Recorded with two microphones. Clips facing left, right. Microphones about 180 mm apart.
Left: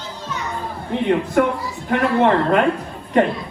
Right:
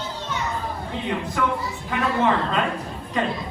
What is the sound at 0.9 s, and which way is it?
A man's voice, 55° left (ahead or behind).